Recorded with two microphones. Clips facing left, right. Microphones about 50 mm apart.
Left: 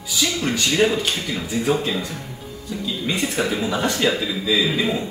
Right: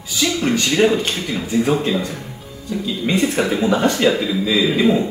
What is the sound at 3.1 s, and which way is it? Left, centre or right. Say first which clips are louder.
Speech: right 6 dB; right.